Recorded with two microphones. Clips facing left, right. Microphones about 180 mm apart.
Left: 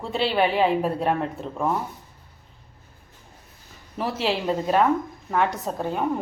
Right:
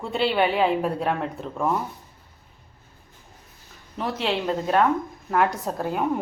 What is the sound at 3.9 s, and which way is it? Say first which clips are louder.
A woman's voice: left 1 dB; 5° left (ahead or behind).